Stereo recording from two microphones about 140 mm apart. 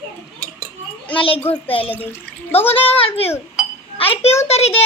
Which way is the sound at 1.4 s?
15° left (ahead or behind).